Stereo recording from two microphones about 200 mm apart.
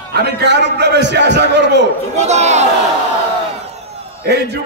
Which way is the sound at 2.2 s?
35° right (ahead or behind).